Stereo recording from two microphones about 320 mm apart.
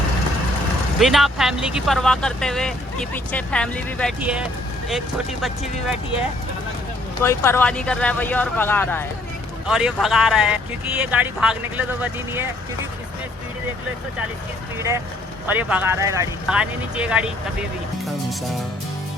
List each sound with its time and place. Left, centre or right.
0.9 s speech: centre
7.2 s speech: centre
14.8 s speech: centre